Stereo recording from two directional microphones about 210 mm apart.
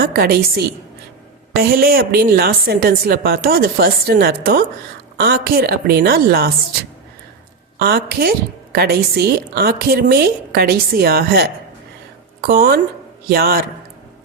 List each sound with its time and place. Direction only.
0.0 s a woman's voice: 45° right (ahead or behind)
7.8 s a woman's voice: 50° right (ahead or behind)